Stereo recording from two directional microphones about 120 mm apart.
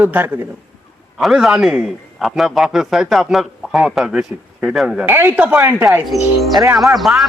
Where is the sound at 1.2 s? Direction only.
5° right (ahead or behind).